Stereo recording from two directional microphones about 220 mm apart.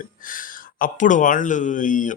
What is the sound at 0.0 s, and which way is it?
Speech, 40° left (ahead or behind).